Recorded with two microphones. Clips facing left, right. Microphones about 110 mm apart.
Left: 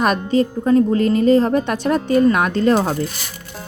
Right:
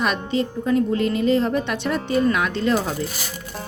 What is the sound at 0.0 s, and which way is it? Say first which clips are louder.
A woman's voice: left 6 dB; 45° left (ahead or behind).